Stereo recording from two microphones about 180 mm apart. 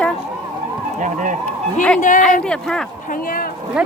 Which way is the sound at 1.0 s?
45° right (ahead or behind).